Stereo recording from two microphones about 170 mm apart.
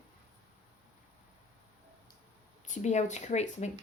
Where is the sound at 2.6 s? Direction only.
45° left (ahead or behind).